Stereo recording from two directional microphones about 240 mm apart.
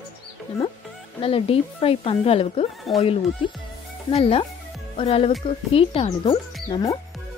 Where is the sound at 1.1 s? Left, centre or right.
Left.